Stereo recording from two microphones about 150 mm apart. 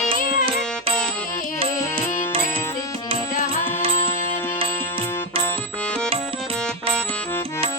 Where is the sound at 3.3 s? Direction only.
55° left (ahead or behind).